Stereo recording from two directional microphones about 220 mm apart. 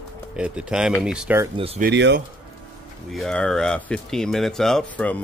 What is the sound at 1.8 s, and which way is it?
Speech, 50° right (ahead or behind).